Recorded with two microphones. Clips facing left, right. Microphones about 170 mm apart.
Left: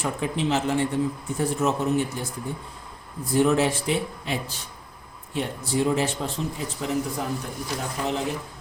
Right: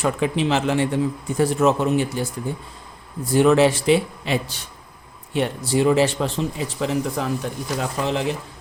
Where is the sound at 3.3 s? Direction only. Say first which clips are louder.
Right 5 dB; 90° right.